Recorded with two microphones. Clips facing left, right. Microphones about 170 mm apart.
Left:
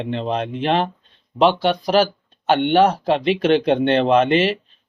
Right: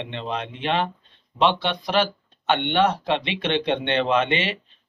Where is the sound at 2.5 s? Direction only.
40° left (ahead or behind).